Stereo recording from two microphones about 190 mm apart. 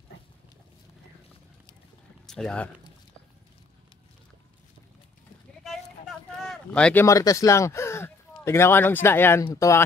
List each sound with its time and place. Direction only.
2.2 s speech: 5° left (ahead or behind)
6.4 s speech: 5° left (ahead or behind)